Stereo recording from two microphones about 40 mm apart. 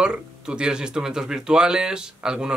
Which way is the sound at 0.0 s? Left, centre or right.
Right.